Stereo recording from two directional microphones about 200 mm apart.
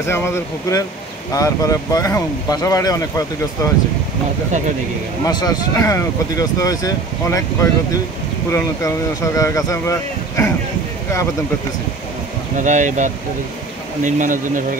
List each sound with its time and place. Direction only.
0.0 s speech: 15° left (ahead or behind)
5.2 s speech: 20° left (ahead or behind)
8.5 s speech: 15° left (ahead or behind)
12.5 s speech: 40° right (ahead or behind)